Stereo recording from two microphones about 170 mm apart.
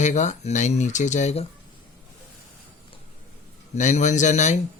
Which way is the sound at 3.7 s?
45° left (ahead or behind).